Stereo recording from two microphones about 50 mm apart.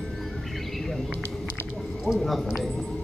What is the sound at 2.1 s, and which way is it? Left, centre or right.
Speech, centre.